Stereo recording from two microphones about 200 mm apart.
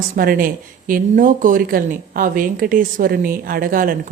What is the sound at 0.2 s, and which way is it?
A woman's voice, 45° right (ahead or behind).